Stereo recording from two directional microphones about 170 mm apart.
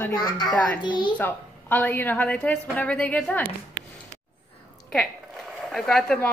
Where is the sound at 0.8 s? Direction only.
25° left (ahead or behind).